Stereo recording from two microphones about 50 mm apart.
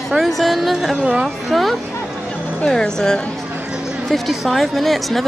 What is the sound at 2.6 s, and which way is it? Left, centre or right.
Speech, centre.